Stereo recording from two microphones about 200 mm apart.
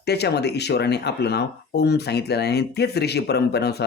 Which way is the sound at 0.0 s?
55° left (ahead or behind).